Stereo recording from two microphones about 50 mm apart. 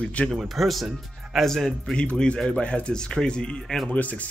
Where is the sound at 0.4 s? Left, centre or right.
Centre.